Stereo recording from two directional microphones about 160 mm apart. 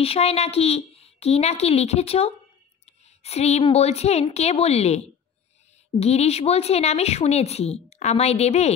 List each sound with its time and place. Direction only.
0.0 s a woman's voice: 40° left (ahead or behind)